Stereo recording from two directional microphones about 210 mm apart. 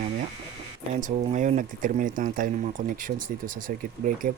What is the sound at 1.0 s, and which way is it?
Speech, 35° right (ahead or behind).